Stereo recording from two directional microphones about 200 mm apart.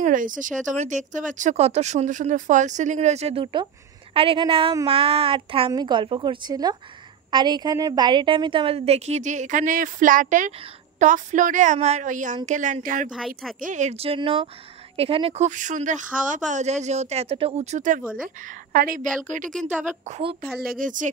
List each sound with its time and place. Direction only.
0.0 s a woman's voice: 40° right (ahead or behind)
20.6 s speech: 45° right (ahead or behind)